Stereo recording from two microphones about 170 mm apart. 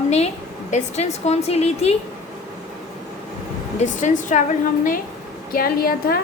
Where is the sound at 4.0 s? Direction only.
45° left (ahead or behind).